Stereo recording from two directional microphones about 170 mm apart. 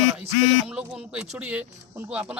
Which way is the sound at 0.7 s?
5° right (ahead or behind).